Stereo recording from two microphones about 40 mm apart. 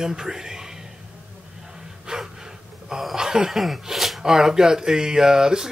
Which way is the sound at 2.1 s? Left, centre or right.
Right.